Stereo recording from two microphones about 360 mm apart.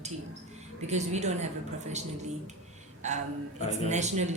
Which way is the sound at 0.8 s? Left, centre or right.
Centre.